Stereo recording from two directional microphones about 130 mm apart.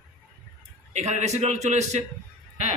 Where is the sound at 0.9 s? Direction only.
60° right (ahead or behind).